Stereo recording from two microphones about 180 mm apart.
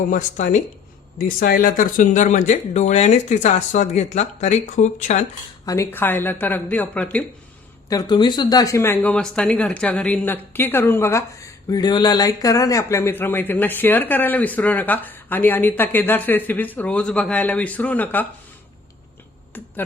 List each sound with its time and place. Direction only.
0.1 s speech: 45° left (ahead or behind)
1.4 s speech: 55° left (ahead or behind)
5.6 s speech: 15° left (ahead or behind)
7.9 s speech: 20° left (ahead or behind)
19.5 s a sound: 10° left (ahead or behind)